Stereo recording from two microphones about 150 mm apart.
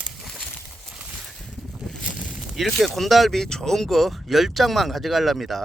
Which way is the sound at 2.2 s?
10° right (ahead or behind).